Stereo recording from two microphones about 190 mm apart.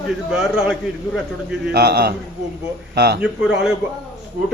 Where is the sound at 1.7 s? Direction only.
55° right (ahead or behind).